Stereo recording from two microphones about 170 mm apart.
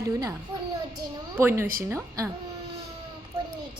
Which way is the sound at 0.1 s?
20° right (ahead or behind).